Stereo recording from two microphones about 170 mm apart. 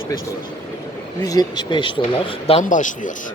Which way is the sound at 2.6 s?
50° left (ahead or behind).